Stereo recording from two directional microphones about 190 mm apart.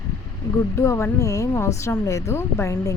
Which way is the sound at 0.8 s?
15° left (ahead or behind).